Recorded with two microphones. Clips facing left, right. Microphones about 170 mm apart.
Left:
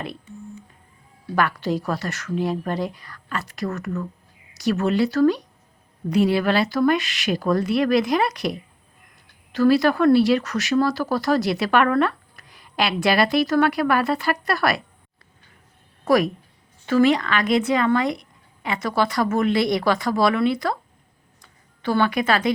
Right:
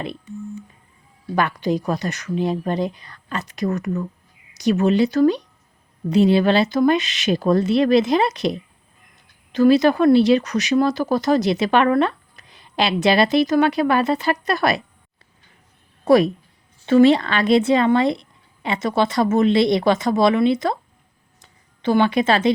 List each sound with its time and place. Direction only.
1.4 s speech: 20° right (ahead or behind)
16.0 s speech: 25° right (ahead or behind)